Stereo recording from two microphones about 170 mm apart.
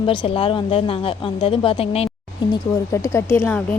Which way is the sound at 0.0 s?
30° left (ahead or behind).